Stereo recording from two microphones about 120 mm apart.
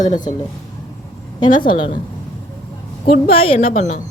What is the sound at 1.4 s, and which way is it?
Speech, 40° left (ahead or behind).